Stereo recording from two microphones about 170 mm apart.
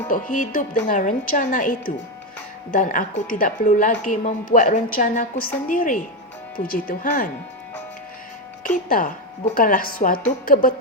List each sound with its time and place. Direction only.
0.1 s speech: 50° left (ahead or behind)
8.6 s a woman's voice: 50° left (ahead or behind)